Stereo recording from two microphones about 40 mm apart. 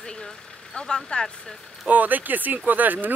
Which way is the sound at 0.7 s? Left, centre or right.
Left.